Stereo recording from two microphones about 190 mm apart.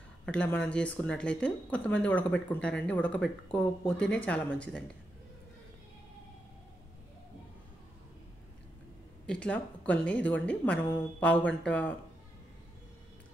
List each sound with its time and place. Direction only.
0.2 s speech: 5° left (ahead or behind)
9.2 s speech: 5° left (ahead or behind)